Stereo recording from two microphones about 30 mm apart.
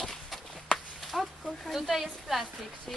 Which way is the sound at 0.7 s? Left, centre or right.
Centre.